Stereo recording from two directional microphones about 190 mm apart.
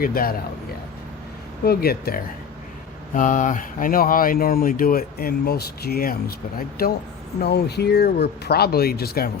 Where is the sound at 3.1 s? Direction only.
40° left (ahead or behind).